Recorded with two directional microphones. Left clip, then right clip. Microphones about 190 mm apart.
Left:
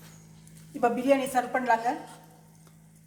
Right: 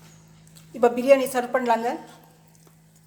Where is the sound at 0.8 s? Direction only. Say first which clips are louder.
Right 6 dB; 55° right (ahead or behind).